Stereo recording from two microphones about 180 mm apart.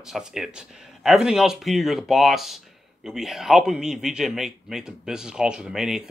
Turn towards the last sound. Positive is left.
turn(degrees=-5)  # may be behind; listen again after turning